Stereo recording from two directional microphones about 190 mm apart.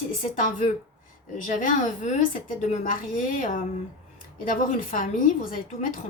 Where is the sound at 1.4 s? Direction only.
45° left (ahead or behind).